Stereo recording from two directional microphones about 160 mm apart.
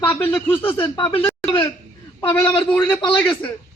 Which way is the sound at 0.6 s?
30° left (ahead or behind).